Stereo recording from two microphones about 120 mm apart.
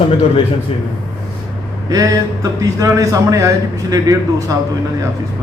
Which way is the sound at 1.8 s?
30° right (ahead or behind).